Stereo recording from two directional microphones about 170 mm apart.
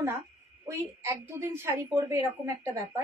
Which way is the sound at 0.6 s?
15° right (ahead or behind).